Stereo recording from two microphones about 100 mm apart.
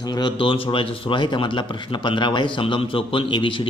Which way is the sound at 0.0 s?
40° left (ahead or behind).